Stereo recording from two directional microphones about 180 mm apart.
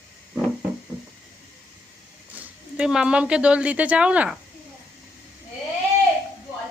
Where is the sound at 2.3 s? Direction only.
5° right (ahead or behind).